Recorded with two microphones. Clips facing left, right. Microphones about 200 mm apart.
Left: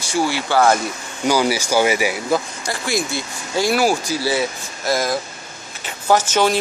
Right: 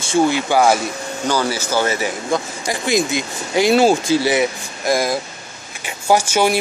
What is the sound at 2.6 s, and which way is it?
Speech, 20° right (ahead or behind).